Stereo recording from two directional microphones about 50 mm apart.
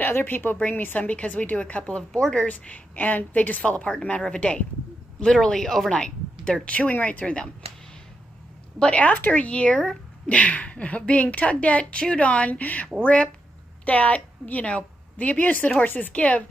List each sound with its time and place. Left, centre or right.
0.0 s a woman's voice: left
1.0 s a woman's voice: left
5.2 s a woman's voice: centre
8.7 s a woman's voice: left
13.0 s a woman's voice: left